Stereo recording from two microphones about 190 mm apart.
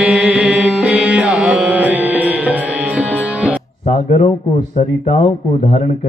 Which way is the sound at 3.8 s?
35° left (ahead or behind).